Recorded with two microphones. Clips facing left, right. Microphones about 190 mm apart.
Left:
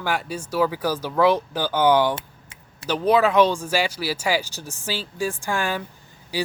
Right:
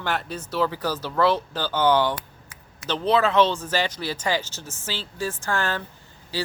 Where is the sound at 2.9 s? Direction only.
10° left (ahead or behind).